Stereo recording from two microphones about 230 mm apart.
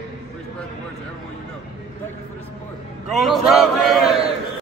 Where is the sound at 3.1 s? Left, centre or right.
Centre.